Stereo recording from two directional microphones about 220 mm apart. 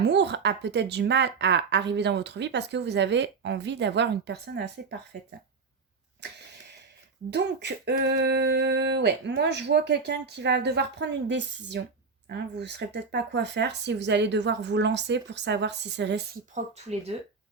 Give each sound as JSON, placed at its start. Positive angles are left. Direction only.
{"t": 0.0, "sound": "a woman's voice", "side_deg": -50}
{"t": 7.3, "sound": "a woman's voice", "side_deg": -50}
{"t": 16.6, "sound": "speech", "side_deg": -30}